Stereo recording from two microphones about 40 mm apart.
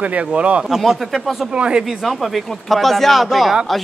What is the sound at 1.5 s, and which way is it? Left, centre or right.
Speech, right.